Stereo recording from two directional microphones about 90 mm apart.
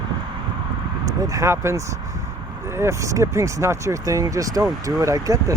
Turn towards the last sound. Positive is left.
turn(degrees=-35)  # may be behind; listen again after turning